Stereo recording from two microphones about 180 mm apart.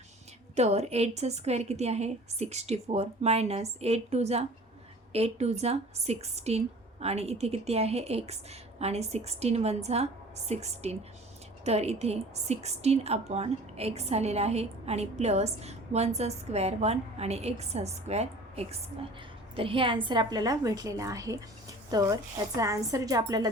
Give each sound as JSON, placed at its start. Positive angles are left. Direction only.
{"t": 0.5, "sound": "a woman's voice", "side_deg": -40}